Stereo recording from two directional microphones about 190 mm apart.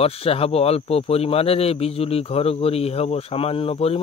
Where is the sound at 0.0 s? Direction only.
30° left (ahead or behind).